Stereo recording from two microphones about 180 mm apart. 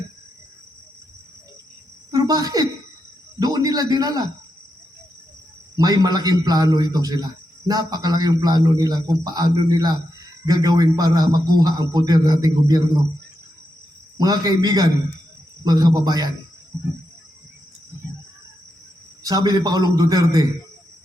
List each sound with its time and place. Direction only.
2.0 s cricket: 20° right (ahead or behind)
3.4 s a man's voice: 20° right (ahead or behind)
5.7 s a man's voice: 20° right (ahead or behind)
14.2 s a man's voice: 20° right (ahead or behind)
19.2 s a man's voice: 20° right (ahead or behind)